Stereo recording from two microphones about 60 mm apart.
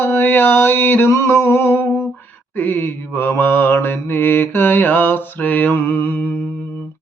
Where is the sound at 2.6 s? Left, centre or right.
Left.